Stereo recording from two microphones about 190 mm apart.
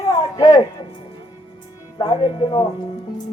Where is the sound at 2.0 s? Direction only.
25° left (ahead or behind).